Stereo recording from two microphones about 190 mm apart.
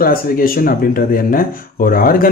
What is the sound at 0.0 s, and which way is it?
Speech, 50° left (ahead or behind).